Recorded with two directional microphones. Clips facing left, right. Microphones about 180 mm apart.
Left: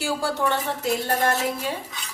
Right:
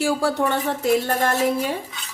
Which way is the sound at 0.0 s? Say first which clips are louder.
Right 5 dB; 60° right (ahead or behind).